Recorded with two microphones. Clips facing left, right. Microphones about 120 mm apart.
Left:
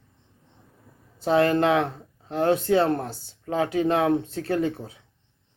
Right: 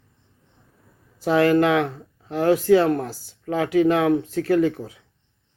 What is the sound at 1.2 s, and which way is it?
Speech, 25° left (ahead or behind).